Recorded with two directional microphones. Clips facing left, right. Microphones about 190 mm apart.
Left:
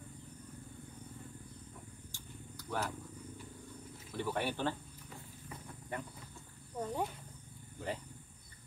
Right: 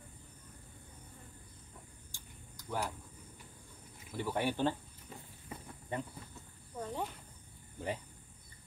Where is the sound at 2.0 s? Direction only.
10° right (ahead or behind).